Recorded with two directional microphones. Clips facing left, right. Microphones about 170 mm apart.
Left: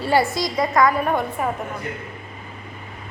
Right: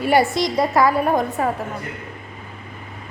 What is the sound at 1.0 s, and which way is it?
Speech, 35° right (ahead or behind).